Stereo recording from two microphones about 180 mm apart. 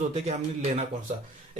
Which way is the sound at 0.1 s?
35° right (ahead or behind).